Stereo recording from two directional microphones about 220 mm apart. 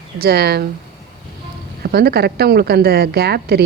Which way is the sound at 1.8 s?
45° right (ahead or behind).